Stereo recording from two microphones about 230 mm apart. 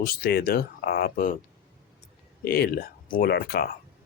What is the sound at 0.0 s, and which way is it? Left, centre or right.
Speech, left.